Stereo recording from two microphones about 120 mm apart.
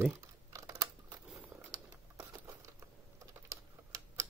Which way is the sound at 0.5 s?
30° right (ahead or behind).